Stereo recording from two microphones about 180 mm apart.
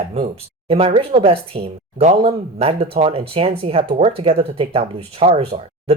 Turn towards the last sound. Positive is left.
turn(degrees=-30)  # may be behind; listen again after turning